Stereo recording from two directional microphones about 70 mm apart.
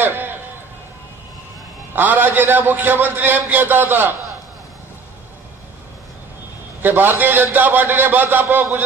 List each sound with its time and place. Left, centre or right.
0.0 s a sound: right
2.0 s a man's voice: right
6.8 s a man's voice: right